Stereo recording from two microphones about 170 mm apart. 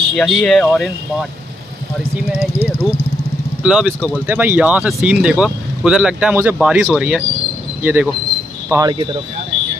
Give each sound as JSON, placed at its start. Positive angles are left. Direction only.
{"t": 0.1, "sound": "speech", "side_deg": 5}
{"t": 2.6, "sound": "a sound", "side_deg": -5}
{"t": 3.6, "sound": "speech", "side_deg": -5}
{"t": 8.9, "sound": "speech", "side_deg": -25}